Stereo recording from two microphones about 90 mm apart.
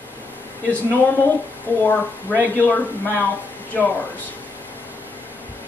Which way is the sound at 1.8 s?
20° left (ahead or behind).